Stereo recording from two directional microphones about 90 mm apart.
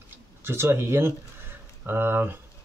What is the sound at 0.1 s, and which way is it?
Speech, 25° right (ahead or behind).